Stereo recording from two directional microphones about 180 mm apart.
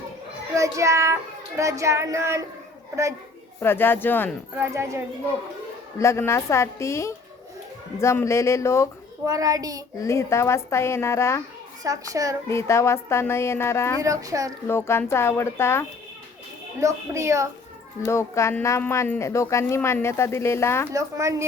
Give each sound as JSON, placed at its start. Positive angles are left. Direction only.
{"t": 0.5, "sound": "child singing", "side_deg": -15}
{"t": 3.6, "sound": "a woman's voice", "side_deg": 10}
{"t": 4.5, "sound": "child singing", "side_deg": -15}
{"t": 6.0, "sound": "a woman's voice", "side_deg": 15}
{"t": 9.2, "sound": "a child's voice", "side_deg": -20}
{"t": 10.0, "sound": "a woman's voice", "side_deg": 15}
{"t": 11.8, "sound": "a child's voice", "side_deg": -20}
{"t": 12.5, "sound": "a woman's voice", "side_deg": 15}
{"t": 14.0, "sound": "a child's voice", "side_deg": -20}
{"t": 14.7, "sound": "a woman's voice", "side_deg": 15}
{"t": 16.8, "sound": "child singing", "side_deg": -15}
{"t": 18.0, "sound": "a woman's voice", "side_deg": 15}
{"t": 20.9, "sound": "child singing", "side_deg": -15}